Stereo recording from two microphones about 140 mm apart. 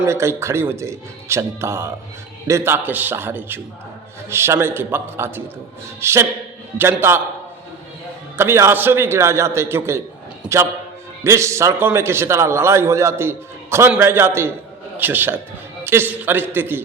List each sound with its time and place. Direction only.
0.0 s a man's voice: 20° right (ahead or behind)
8.4 s a man's voice: 15° right (ahead or behind)
11.2 s a man's voice: 20° right (ahead or behind)